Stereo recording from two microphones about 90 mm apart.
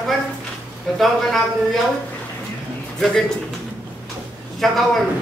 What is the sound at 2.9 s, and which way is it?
Speech, 5° left (ahead or behind).